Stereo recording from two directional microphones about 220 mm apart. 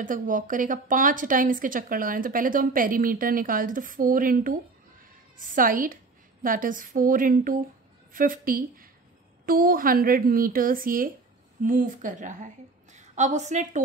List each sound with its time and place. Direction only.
0.0 s a woman's voice: 35° right (ahead or behind)